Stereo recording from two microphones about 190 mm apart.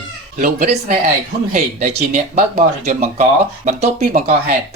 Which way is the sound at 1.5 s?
40° right (ahead or behind).